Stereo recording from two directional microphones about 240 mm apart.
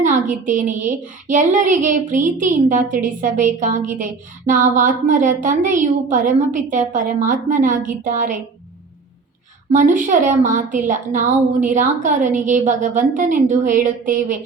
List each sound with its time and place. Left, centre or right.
0.0 s a child's voice: right
9.7 s a child's voice: right